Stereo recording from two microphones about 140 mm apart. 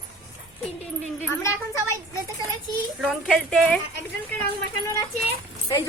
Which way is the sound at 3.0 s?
Centre (ahead or behind).